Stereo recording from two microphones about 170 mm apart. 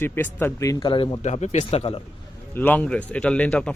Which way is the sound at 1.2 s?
40° left (ahead or behind).